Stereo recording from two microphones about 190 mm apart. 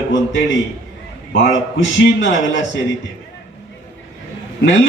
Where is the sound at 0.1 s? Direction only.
80° left.